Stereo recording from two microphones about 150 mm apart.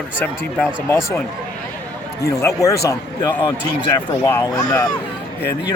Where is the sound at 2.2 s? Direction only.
20° left (ahead or behind).